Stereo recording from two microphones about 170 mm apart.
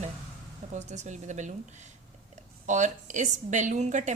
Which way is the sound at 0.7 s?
45° right (ahead or behind).